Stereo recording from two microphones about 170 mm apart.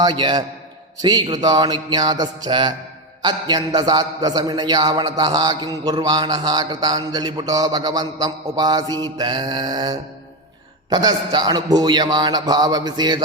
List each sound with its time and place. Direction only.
0.0 s a man's voice: 25° right (ahead or behind)